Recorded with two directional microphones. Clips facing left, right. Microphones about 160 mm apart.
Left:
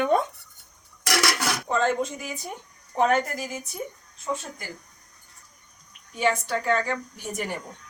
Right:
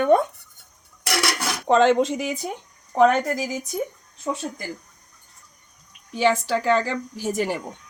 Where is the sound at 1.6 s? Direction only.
90° right.